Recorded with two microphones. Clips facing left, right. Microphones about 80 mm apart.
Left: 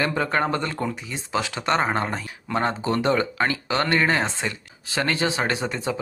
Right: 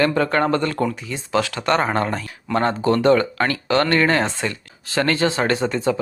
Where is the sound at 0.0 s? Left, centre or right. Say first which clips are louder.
Right 5 dB; centre.